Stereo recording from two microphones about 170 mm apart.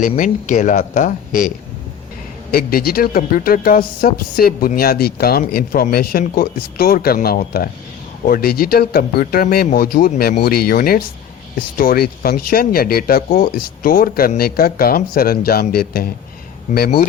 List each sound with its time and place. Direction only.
0.0 s speech: 50° left (ahead or behind)
2.5 s speech: 60° left (ahead or behind)